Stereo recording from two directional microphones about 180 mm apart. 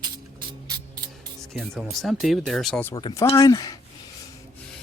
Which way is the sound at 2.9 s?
25° left (ahead or behind).